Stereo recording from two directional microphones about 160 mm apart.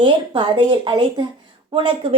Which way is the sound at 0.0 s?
30° right (ahead or behind).